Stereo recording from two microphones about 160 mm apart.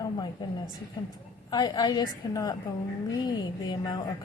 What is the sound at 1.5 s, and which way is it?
A woman's voice, 25° left (ahead or behind).